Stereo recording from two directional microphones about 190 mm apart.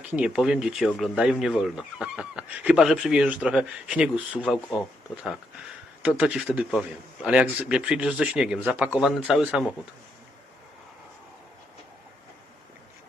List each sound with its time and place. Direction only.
0.1 s speech: 5° right (ahead or behind)